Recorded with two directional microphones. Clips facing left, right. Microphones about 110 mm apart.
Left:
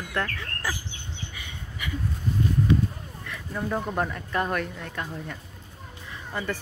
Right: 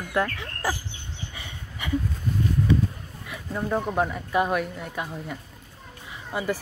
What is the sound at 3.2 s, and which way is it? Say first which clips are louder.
Speech: right 2 dB; 10° right (ahead or behind).